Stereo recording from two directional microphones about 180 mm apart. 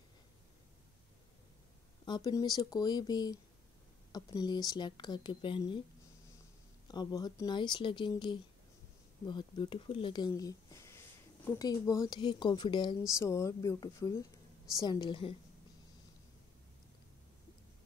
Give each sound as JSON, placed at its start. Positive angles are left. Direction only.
{"t": 2.0, "sound": "speech", "side_deg": 20}
{"t": 6.9, "sound": "speech", "side_deg": 20}